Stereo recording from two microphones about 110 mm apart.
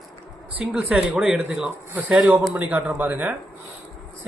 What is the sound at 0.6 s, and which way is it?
A man's voice, 10° right (ahead or behind).